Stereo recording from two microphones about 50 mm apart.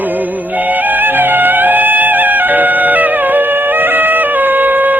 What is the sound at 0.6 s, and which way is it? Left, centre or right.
Music, right.